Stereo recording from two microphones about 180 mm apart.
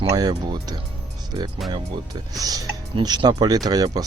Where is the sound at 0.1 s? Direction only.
20° right (ahead or behind).